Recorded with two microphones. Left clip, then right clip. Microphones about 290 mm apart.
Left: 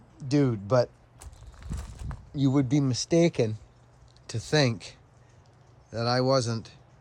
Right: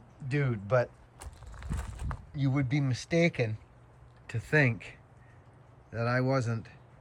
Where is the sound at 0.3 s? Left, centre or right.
Centre.